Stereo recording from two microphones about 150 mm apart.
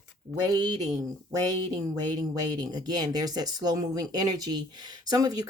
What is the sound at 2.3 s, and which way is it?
Speech, 25° right (ahead or behind).